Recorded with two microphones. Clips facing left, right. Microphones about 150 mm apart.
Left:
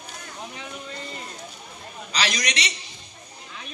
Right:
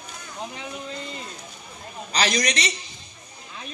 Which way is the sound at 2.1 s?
45° right (ahead or behind).